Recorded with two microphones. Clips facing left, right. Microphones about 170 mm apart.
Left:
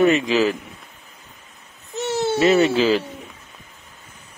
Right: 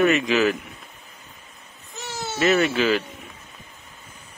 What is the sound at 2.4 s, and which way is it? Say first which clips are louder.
Speech: left 3 dB; 30° left (ahead or behind).